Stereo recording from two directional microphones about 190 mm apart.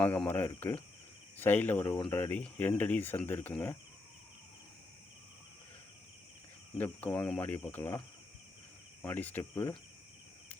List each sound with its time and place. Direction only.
0.0 s speech: 10° left (ahead or behind)
6.7 s speech: 10° left (ahead or behind)
9.0 s speech: 10° left (ahead or behind)